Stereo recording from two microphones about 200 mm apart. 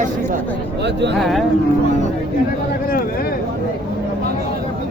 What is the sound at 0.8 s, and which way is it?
Speech, 60° right (ahead or behind).